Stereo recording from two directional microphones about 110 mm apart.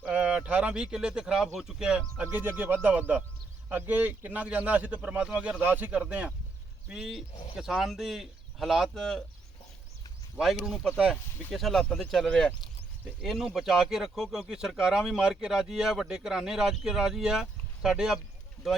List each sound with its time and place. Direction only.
0.0 s a sound: 10° right (ahead or behind)
1.5 s speech: 5° right (ahead or behind)
2.2 s speech: 20° right (ahead or behind); by 9.2 s 5° left (ahead or behind)
10.3 s speech: 5° right (ahead or behind)
11.5 s speech: centre (ahead or behind)